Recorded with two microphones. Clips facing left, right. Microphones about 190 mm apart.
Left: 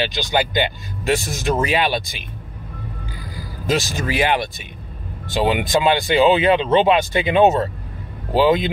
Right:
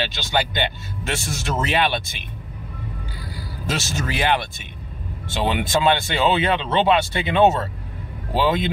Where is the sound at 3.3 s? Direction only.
15° left (ahead or behind).